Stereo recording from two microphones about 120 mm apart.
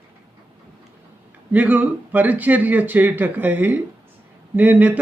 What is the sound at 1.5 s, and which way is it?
A man's voice, 15° right (ahead or behind).